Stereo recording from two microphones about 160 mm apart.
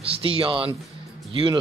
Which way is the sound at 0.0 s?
35° right (ahead or behind).